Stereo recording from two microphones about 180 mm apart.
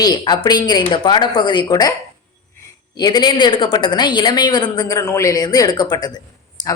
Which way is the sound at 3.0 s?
25° left (ahead or behind).